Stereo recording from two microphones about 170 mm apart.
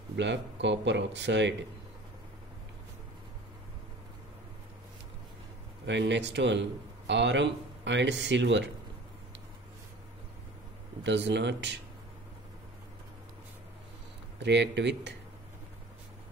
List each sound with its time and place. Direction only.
0.1 s speech: 90° right
5.9 s speech: 90° right
11.1 s speech: 90° right
14.4 s speech: 90° right